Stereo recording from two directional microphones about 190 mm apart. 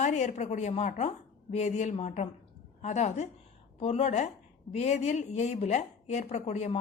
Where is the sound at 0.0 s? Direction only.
40° left (ahead or behind).